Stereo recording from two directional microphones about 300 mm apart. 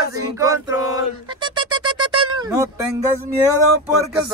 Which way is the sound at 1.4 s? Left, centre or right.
Centre.